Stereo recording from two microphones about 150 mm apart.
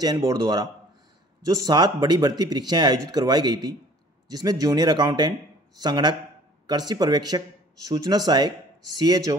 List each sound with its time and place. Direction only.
0.0 s speech: 25° right (ahead or behind)